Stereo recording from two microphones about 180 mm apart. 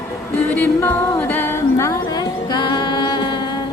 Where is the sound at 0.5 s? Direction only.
10° left (ahead or behind).